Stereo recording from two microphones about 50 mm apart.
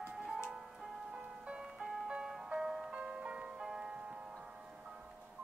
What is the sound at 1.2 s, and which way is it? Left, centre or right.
Music, right.